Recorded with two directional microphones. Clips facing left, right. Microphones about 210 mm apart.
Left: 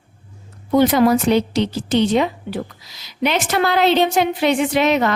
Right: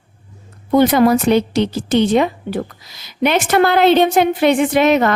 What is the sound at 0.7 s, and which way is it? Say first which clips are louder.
A woman's voice: right 2 dB; 55° right (ahead or behind).